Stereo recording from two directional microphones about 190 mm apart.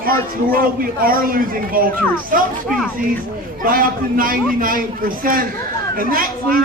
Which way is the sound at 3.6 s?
50° right (ahead or behind).